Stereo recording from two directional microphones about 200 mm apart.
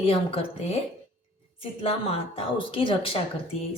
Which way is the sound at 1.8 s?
30° left (ahead or behind).